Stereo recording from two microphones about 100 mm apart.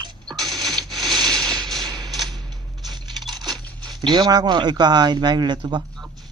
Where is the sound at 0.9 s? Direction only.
Centre (ahead or behind).